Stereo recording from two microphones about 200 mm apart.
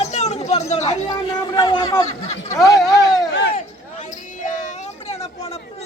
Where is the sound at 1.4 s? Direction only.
20° left (ahead or behind).